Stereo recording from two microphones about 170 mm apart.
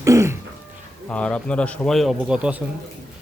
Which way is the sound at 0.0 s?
20° right (ahead or behind).